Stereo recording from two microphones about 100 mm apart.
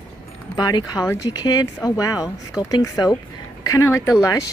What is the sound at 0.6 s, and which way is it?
Speech, 40° left (ahead or behind).